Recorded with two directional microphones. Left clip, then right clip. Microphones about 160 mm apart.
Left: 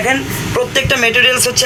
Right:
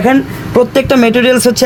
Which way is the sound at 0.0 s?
80° right.